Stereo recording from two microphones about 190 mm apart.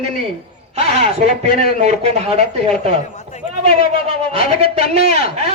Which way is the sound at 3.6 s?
30° right (ahead or behind).